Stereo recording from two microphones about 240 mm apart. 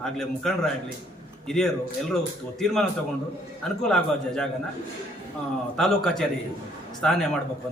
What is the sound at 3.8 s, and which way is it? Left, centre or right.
Speech, centre.